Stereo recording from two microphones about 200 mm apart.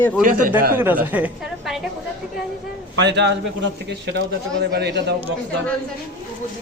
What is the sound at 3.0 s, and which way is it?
Speech, 60° right (ahead or behind).